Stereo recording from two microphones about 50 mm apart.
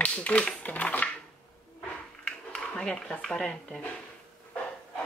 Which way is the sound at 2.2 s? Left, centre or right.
Centre.